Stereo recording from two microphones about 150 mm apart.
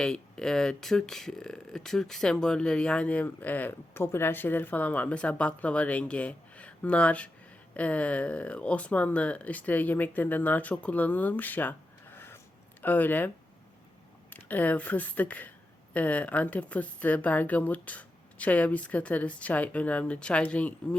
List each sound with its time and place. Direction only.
0.0 s speech: 5° left (ahead or behind)
12.1 s a sound: 15° left (ahead or behind)
12.8 s speech: 10° left (ahead or behind)